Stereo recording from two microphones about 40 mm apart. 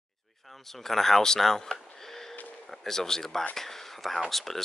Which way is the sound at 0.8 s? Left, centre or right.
Centre.